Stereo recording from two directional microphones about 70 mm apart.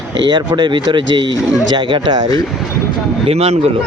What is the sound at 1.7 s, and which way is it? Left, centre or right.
Speech, right.